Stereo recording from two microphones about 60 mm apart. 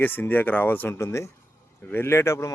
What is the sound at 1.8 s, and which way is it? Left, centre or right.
Speech, left.